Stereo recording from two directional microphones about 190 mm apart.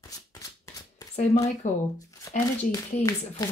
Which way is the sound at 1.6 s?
40° left (ahead or behind).